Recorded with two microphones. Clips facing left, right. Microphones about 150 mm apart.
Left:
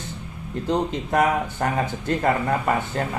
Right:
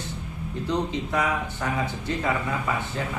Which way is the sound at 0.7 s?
50° left (ahead or behind).